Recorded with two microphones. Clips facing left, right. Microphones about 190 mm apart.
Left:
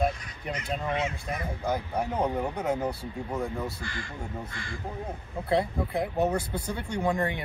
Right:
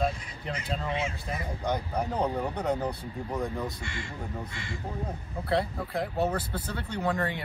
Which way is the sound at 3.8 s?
25° right (ahead or behind).